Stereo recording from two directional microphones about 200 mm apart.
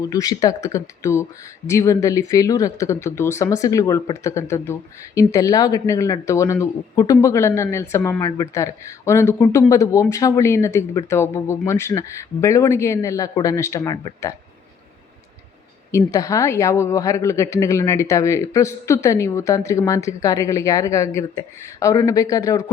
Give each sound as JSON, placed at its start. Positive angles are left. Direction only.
{"t": 0.0, "sound": "speech", "side_deg": 20}
{"t": 15.9, "sound": "speech", "side_deg": 15}